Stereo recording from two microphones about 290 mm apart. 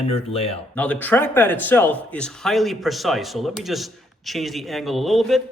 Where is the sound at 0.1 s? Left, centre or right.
Centre.